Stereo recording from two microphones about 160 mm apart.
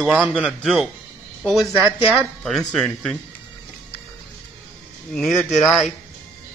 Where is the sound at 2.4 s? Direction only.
5° left (ahead or behind).